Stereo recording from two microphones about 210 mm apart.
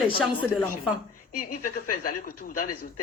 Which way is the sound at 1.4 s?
40° left (ahead or behind).